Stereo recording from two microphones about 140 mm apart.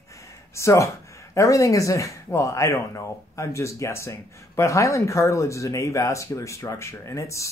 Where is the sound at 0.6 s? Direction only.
20° left (ahead or behind).